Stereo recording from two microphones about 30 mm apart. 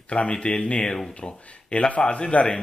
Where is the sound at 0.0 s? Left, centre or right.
Left.